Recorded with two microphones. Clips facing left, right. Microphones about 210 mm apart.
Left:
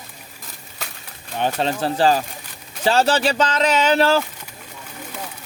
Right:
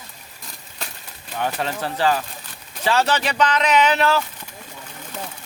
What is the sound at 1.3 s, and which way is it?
Speech, 30° left (ahead or behind).